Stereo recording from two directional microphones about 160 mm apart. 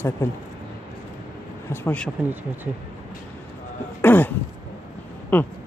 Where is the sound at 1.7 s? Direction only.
10° left (ahead or behind).